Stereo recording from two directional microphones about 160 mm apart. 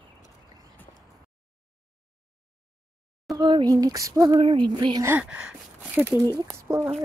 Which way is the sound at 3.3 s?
25° right (ahead or behind).